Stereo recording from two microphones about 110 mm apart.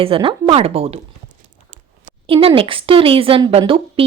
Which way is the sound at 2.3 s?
55° right (ahead or behind).